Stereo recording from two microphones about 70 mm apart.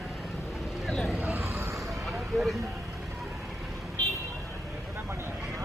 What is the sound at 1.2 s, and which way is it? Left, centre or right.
Vehicle, right.